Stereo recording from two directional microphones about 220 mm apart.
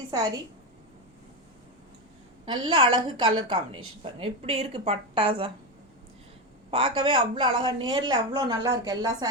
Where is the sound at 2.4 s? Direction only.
20° right (ahead or behind).